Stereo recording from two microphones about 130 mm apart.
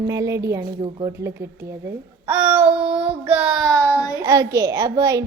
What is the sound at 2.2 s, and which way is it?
Child singing, 15° right (ahead or behind).